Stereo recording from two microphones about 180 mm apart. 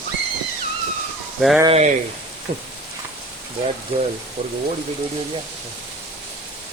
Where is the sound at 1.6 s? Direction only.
35° right (ahead or behind).